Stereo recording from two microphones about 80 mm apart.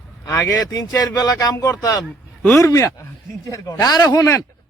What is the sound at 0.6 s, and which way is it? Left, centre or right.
Speech, left.